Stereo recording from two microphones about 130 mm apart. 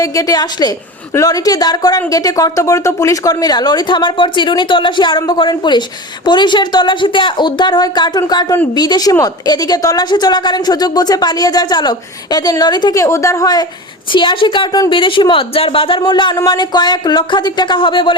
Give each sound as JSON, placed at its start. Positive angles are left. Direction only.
{"t": 0.0, "sound": "a woman's voice", "side_deg": 25}